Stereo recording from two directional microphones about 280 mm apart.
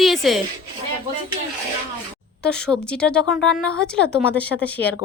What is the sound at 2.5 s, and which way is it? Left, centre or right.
A woman's voice, centre.